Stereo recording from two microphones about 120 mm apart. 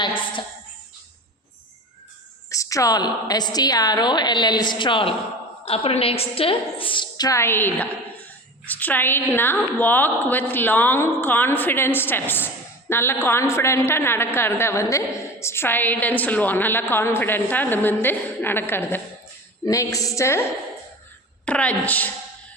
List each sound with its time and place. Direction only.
0.0 s a sound: 45° left (ahead or behind)
2.5 s a woman's voice: 25° left (ahead or behind); by 5.1 s 45° left (ahead or behind)
5.6 s a woman's voice: 55° left (ahead or behind)
7.3 s a woman's voice: 20° left (ahead or behind)
21.4 s a woman's voice: 10° left (ahead or behind)